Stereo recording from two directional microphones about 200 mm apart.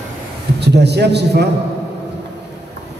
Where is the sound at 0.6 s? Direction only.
55° right (ahead or behind).